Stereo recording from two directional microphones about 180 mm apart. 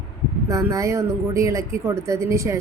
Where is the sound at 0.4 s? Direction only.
15° right (ahead or behind).